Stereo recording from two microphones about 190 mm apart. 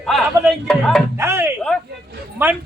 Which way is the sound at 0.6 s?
5° left (ahead or behind).